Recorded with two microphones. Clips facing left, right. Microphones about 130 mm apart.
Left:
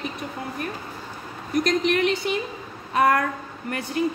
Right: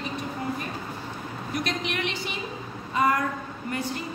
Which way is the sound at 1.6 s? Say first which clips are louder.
Left 12 dB; 45° left (ahead or behind).